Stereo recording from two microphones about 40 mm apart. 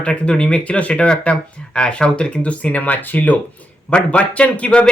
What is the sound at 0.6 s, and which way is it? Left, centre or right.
Speech, left.